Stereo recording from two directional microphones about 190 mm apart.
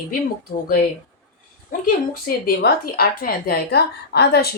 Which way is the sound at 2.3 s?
50° left (ahead or behind).